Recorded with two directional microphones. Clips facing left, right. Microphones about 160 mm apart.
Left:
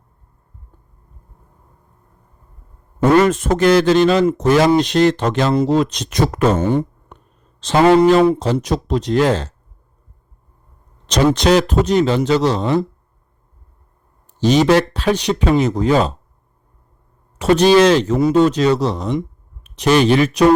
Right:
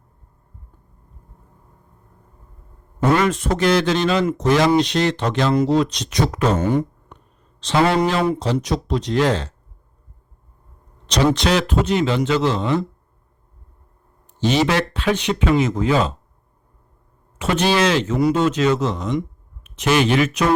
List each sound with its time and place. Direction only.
3.2 s speech: 45° left (ahead or behind)
6.6 s speech: 30° left (ahead or behind)
7.6 s speech: 45° left (ahead or behind)
11.0 s speech: 40° left (ahead or behind)
14.3 s speech: 40° left (ahead or behind)
17.3 s speech: 40° left (ahead or behind)